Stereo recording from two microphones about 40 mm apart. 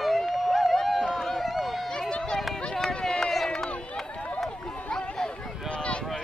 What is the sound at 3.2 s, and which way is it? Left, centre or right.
Run, centre.